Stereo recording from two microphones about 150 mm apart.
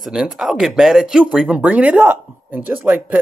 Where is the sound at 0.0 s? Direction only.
5° right (ahead or behind).